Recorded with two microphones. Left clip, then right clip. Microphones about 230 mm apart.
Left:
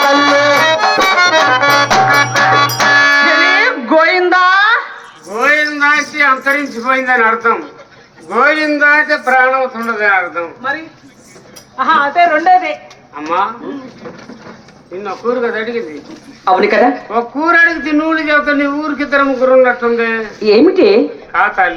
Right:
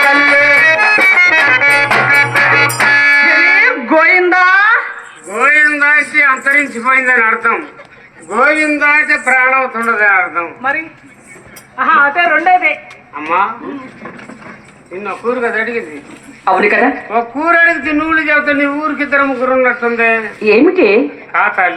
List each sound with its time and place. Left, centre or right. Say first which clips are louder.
0.0 s music: right 1 dB; left
5.3 s a sound: right 3 dB; centre
6.7 s a man's voice: right 2 dB; centre
8.3 s speech: even; centre; by 10.8 s right
11.8 s a man's voice: even; right
15.0 s a man's voice: even; right